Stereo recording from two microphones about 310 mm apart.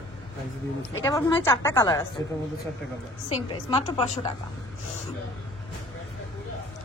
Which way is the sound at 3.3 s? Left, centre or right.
Centre.